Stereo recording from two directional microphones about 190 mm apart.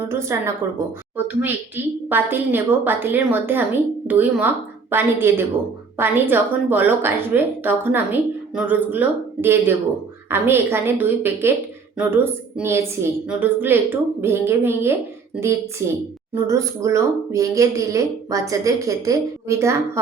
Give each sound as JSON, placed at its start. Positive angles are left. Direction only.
{"t": 0.1, "sound": "a woman's voice", "side_deg": -15}
{"t": 16.3, "sound": "a woman's voice", "side_deg": -15}